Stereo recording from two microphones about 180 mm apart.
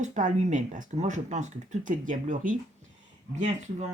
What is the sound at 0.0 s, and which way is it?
Speech, 45° right (ahead or behind).